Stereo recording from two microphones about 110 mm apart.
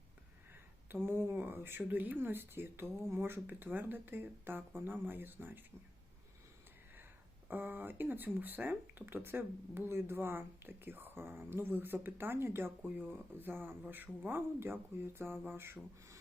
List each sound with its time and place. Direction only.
0.9 s speech: 20° right (ahead or behind)
7.4 s speech: 15° right (ahead or behind)